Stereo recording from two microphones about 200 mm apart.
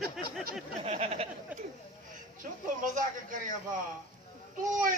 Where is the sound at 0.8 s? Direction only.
35° right (ahead or behind).